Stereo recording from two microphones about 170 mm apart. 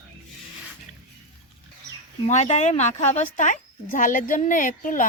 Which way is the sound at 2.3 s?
40° left (ahead or behind).